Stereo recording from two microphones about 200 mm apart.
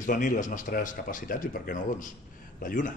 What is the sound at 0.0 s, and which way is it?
A man's voice, 40° left (ahead or behind).